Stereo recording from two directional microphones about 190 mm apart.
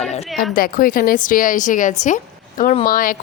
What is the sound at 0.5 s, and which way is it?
A woman's voice, 50° left (ahead or behind).